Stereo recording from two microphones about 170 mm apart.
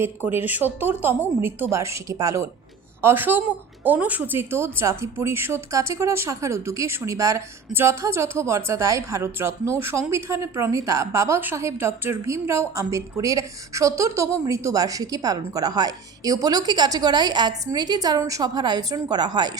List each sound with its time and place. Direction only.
0.3 s a woman's voice: 10° right (ahead or behind)